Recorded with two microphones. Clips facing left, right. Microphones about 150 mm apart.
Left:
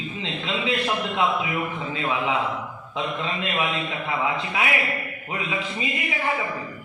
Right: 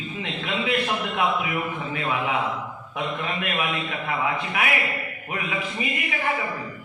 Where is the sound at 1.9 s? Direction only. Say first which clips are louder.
Left 1 dB; 25° left (ahead or behind).